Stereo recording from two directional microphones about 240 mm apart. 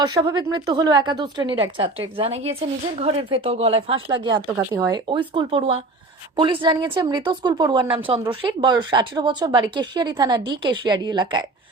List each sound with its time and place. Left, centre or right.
0.0 s a woman's voice: centre